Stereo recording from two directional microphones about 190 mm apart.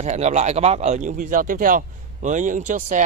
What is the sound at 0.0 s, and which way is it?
A man's voice, 35° right (ahead or behind).